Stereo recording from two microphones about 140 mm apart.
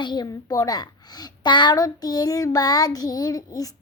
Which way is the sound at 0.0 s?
30° left (ahead or behind).